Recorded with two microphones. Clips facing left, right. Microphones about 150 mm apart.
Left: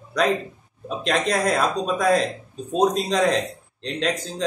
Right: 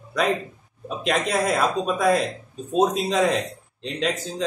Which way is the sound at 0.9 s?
5° right (ahead or behind).